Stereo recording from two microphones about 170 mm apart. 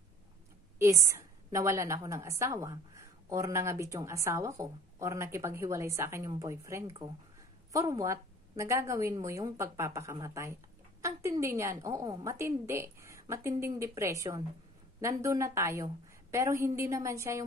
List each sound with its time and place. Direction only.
0.7 s a woman's voice: 15° right (ahead or behind)